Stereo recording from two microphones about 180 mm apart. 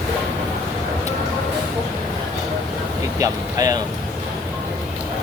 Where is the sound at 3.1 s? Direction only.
20° right (ahead or behind).